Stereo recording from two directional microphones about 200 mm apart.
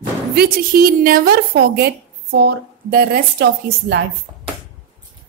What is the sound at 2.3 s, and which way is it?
A woman's voice, 50° right (ahead or behind).